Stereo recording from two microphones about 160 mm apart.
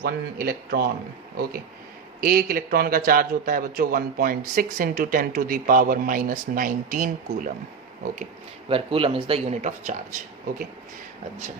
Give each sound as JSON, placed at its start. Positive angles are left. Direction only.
{"t": 0.0, "sound": "speech", "side_deg": -70}
{"t": 2.2, "sound": "a man's voice", "side_deg": -65}
{"t": 8.7, "sound": "speech", "side_deg": -35}